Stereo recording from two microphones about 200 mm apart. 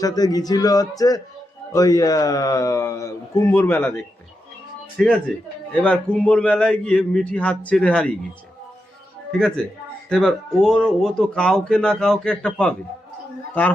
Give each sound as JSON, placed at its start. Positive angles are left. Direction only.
{"t": 0.0, "sound": "a man's voice", "side_deg": 20}
{"t": 10.1, "sound": "a man's voice", "side_deg": 0}